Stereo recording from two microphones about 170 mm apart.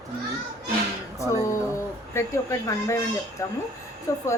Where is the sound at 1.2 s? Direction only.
20° right (ahead or behind).